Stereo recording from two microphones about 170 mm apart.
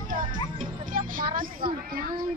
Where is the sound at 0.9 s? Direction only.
55° right (ahead or behind).